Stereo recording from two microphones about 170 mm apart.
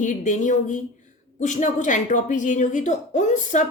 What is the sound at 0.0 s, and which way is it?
Speech, 50° left (ahead or behind).